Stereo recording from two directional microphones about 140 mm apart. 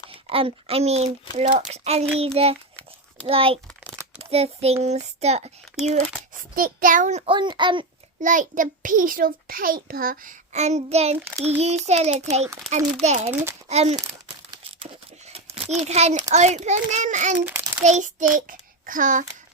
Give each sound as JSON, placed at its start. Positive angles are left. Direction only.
{"t": 0.1, "sound": "a child's voice", "side_deg": -40}
{"t": 5.8, "sound": "speech", "side_deg": -5}
{"t": 6.6, "sound": "a child's voice", "side_deg": -85}
{"t": 7.3, "sound": "a child's voice", "side_deg": -35}
{"t": 8.2, "sound": "a child's voice", "side_deg": -65}
{"t": 10.5, "sound": "speech", "side_deg": -55}
{"t": 13.3, "sound": "a child's voice", "side_deg": -20}
{"t": 13.7, "sound": "speech", "side_deg": -50}
{"t": 15.3, "sound": "a sound", "side_deg": -45}
{"t": 15.8, "sound": "a child's voice", "side_deg": -50}
{"t": 17.4, "sound": "a sound", "side_deg": -10}
{"t": 17.8, "sound": "child singing", "side_deg": -60}